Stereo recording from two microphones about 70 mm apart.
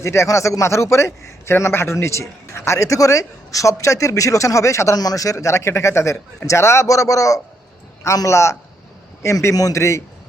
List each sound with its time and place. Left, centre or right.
0.0 s a man's voice: left
4.9 s a man's voice: left